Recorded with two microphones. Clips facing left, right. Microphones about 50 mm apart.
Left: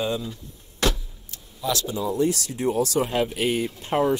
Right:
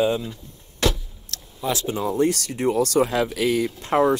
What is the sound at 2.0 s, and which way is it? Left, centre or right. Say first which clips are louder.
Speech: right 3 dB; right.